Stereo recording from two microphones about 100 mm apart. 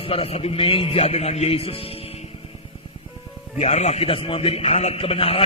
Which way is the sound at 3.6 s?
90° left.